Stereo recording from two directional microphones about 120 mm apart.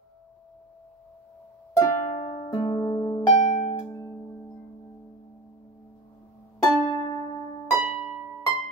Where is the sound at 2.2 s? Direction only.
90° left.